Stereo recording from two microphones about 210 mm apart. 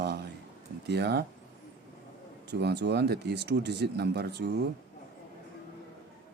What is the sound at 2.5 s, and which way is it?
Speech, 50° right (ahead or behind).